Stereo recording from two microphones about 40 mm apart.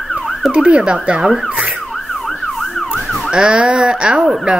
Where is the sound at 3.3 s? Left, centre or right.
Right.